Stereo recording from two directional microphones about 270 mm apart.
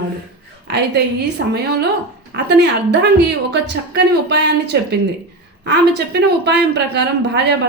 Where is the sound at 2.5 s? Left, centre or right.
Right.